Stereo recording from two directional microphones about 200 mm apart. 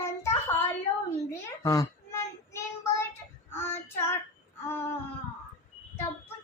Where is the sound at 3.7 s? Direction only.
10° left (ahead or behind).